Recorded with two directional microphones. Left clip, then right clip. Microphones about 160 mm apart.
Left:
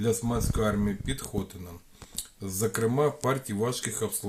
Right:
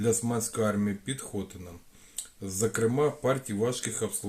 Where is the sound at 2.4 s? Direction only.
45° left (ahead or behind).